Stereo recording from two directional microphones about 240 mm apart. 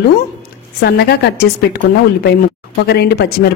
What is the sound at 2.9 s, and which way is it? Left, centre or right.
Speech, left.